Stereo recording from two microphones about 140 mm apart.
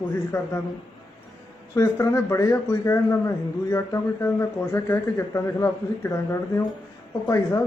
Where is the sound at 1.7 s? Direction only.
20° left (ahead or behind).